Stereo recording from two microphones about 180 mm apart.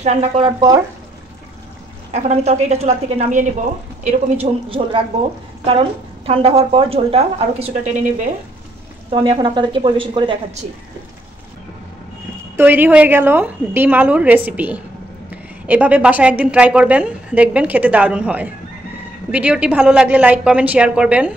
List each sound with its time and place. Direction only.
0.0 s a woman's voice: 35° right (ahead or behind)
0.5 s a woman's voice: 20° right (ahead or behind)
2.1 s a woman's voice: 40° right (ahead or behind)
9.1 s a woman's voice: 25° right (ahead or behind)
12.5 s a woman's voice: 10° right (ahead or behind)